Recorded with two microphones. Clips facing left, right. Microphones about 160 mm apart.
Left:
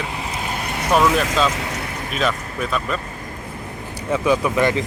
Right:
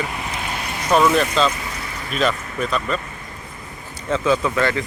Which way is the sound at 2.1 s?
5° left (ahead or behind).